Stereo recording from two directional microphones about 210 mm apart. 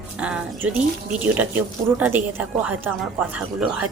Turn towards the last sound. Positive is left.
turn(degrees=-5)  # may be behind; listen again after turning